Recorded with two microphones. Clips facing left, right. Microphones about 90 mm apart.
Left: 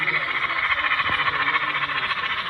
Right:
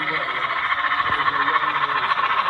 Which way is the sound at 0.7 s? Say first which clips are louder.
Right 4 dB; 25° right (ahead or behind).